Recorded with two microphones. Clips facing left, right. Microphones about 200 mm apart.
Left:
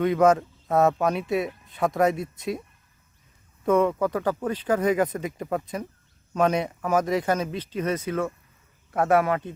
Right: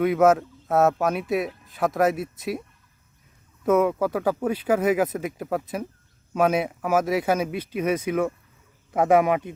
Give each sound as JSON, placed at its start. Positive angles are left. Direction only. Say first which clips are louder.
{"t": 0.0, "sound": "speech", "louder": "right 1 dB", "side_deg": -5}
{"t": 3.7, "sound": "speech", "louder": "right 1 dB", "side_deg": -5}